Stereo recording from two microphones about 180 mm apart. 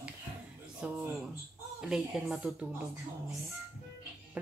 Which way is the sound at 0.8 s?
5° right (ahead or behind).